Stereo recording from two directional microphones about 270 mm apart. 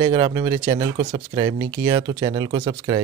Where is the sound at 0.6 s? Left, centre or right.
Right.